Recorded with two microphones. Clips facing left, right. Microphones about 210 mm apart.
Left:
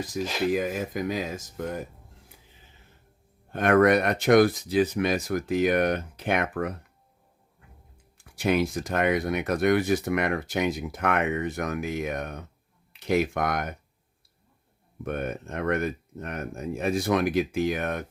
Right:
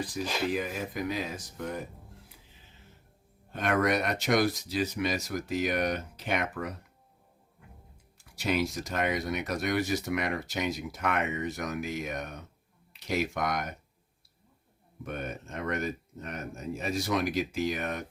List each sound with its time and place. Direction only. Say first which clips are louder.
0.5 s speech: left 5 dB; 45° left (ahead or behind)
3.5 s speech: left 8 dB; 55° left (ahead or behind)
8.2 s speech: left 5 dB; 55° left (ahead or behind)
15.0 s speech: left 6 dB; 55° left (ahead or behind)